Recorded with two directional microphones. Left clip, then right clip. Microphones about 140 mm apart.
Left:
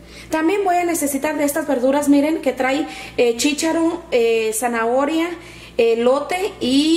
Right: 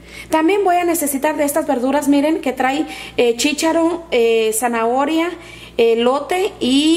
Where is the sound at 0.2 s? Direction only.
25° right (ahead or behind).